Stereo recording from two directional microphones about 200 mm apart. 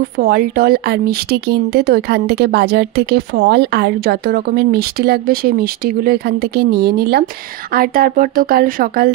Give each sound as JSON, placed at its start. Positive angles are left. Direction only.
{"t": 0.2, "sound": "speech", "side_deg": -50}